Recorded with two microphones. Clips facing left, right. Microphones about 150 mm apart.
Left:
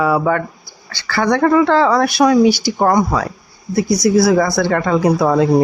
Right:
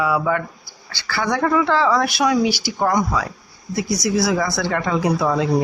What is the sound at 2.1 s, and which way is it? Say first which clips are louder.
Speech: left 7 dB; 40° left (ahead or behind).